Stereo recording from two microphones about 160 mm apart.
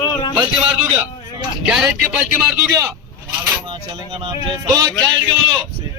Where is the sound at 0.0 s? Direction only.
25° left (ahead or behind).